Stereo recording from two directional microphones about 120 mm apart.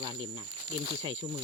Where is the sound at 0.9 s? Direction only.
55° right (ahead or behind).